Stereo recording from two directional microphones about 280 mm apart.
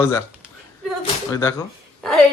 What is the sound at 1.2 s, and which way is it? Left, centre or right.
Speech, centre.